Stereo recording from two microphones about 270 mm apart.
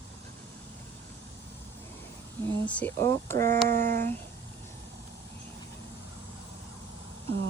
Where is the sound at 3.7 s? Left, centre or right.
Right.